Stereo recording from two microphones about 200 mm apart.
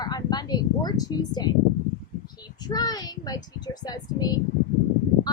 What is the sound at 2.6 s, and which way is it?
A woman's voice, 20° left (ahead or behind).